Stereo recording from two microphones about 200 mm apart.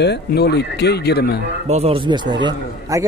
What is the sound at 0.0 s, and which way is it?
Speech, 55° left (ahead or behind).